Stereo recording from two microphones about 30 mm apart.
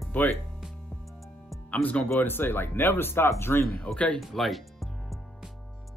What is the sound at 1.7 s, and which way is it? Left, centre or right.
Speech, left.